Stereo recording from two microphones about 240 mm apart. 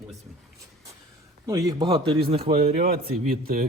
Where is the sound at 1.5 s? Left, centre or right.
Centre.